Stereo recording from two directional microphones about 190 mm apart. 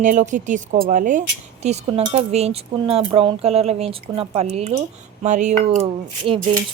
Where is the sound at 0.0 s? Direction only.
40° right (ahead or behind).